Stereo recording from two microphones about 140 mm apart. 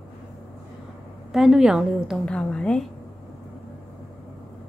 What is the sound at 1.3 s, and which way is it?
A woman's voice, 5° right (ahead or behind).